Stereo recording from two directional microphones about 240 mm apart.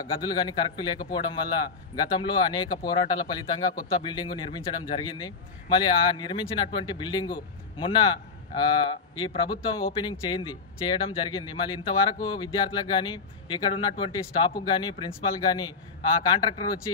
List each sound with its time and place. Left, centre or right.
0.1 s a man's voice: centre